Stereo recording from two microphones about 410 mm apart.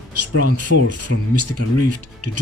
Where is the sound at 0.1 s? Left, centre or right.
Right.